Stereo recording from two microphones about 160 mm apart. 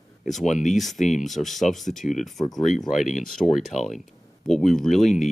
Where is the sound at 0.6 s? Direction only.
50° left (ahead or behind).